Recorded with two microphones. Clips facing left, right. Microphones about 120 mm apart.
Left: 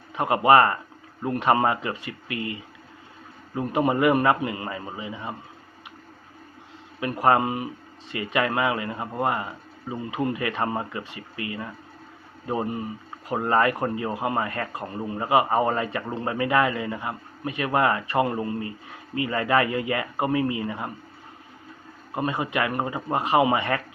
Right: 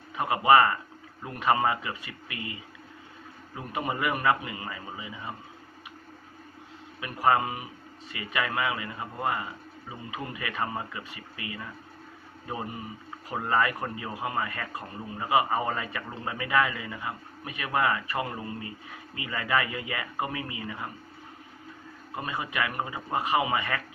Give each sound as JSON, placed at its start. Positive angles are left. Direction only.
{"t": 0.2, "sound": "speech", "side_deg": 35}
{"t": 3.5, "sound": "speech", "side_deg": 35}
{"t": 7.0, "sound": "speech", "side_deg": 40}
{"t": 12.5, "sound": "speech", "side_deg": 35}
{"t": 22.1, "sound": "speech", "side_deg": 30}